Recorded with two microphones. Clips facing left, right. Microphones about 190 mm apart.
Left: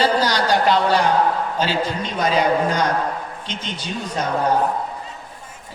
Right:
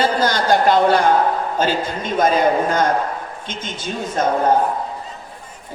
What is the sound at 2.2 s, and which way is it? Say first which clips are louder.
A man's voice: right 2 dB; 50° right (ahead or behind).